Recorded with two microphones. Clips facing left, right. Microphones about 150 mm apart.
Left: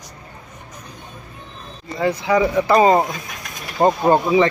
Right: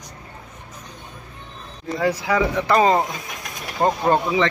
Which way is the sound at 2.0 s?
Centre (ahead or behind).